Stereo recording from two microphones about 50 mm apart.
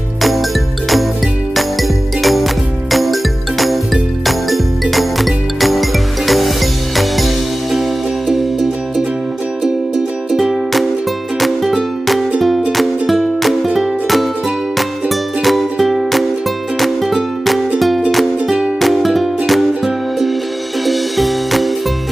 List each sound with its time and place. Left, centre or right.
0.2 s music: centre
11.3 s music: centre